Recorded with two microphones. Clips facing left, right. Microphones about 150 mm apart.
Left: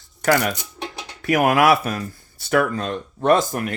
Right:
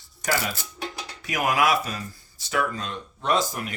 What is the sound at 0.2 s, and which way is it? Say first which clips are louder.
Speech: left 8 dB; 60° left (ahead or behind).